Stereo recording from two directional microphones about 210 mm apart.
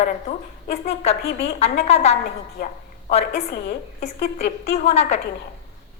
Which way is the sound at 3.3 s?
50° left (ahead or behind).